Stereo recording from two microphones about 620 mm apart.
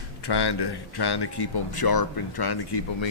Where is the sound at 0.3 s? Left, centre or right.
Left.